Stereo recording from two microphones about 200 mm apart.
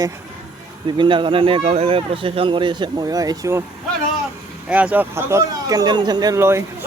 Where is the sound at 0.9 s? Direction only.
25° right (ahead or behind).